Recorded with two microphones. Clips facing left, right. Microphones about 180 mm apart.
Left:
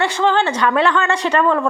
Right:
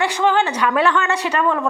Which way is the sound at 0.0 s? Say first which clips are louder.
Left 1 dB; 10° right (ahead or behind).